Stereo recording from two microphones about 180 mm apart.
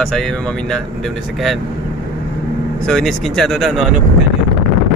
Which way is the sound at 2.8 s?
Centre (ahead or behind).